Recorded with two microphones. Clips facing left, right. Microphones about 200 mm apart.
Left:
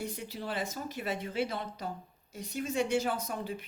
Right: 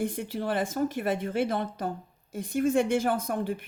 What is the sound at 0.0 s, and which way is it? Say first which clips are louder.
A woman's voice: right 8 dB; 50° right (ahead or behind).